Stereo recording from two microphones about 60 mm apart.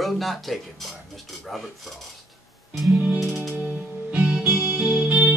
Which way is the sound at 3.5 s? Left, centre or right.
Right.